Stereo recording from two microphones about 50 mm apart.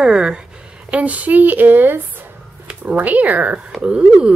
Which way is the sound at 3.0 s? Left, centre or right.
Right.